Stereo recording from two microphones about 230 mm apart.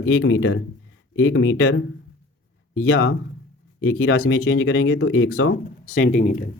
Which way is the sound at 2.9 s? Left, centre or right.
Left.